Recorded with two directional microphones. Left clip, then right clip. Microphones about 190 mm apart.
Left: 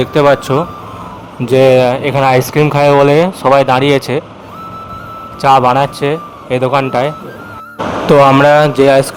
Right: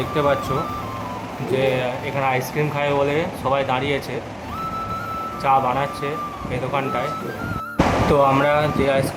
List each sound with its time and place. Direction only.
0.0 s speech: 45° left (ahead or behind)
1.5 s speech: 55° left (ahead or behind)
5.4 s speech: 50° left (ahead or behind)
8.1 s speech: 50° left (ahead or behind)